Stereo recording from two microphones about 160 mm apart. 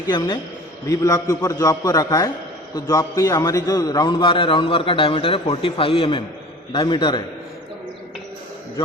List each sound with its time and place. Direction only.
0.1 s a man's voice: 25° left (ahead or behind)